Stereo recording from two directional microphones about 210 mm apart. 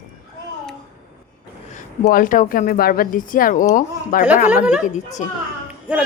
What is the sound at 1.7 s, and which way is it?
Speech, 35° left (ahead or behind).